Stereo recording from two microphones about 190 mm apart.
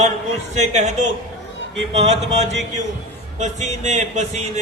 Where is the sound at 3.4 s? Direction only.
40° right (ahead or behind).